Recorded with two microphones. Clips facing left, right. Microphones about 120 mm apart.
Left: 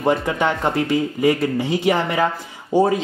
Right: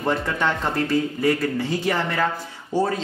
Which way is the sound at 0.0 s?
15° left (ahead or behind).